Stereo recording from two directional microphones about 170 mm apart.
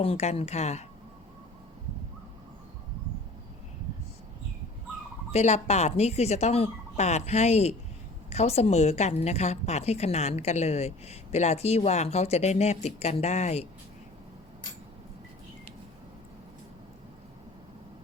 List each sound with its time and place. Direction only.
0.0 s a woman's voice: 40° left (ahead or behind)
5.3 s a woman's voice: 40° left (ahead or behind)